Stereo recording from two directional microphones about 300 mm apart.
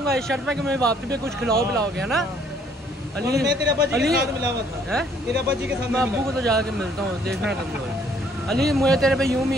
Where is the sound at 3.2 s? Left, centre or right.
Right.